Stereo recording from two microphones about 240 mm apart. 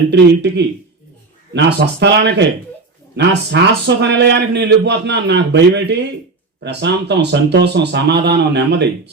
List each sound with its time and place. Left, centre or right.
0.1 s a man's voice: right